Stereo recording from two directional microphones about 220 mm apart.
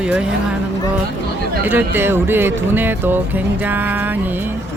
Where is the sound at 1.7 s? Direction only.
10° right (ahead or behind).